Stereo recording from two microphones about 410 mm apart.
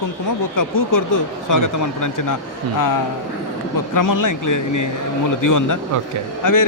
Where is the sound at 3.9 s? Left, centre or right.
Left.